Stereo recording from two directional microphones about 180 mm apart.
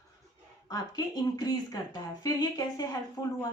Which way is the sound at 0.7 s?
20° left (ahead or behind).